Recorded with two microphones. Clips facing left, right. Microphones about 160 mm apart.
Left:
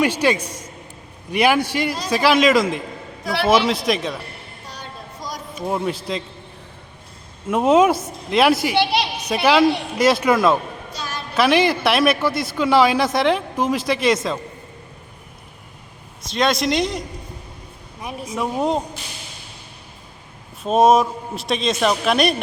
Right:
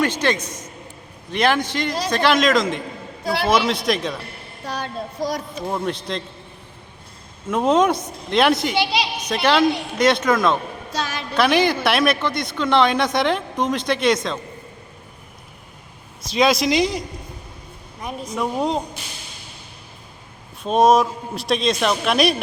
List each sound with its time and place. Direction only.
0.0 s a man's voice: 10° left (ahead or behind)
4.6 s child singing: 65° right (ahead or behind)
5.6 s speech: 5° left (ahead or behind)
7.5 s speech: 5° left (ahead or behind)
8.7 s a woman's voice: 60° left (ahead or behind)
9.2 s a man's voice: 5° left (ahead or behind)
10.9 s a sound: 90° right
11.3 s speech: centre (ahead or behind)
16.2 s speech: centre (ahead or behind)
18.0 s speech: 5° left (ahead or behind)
20.7 s speech: 5° left (ahead or behind)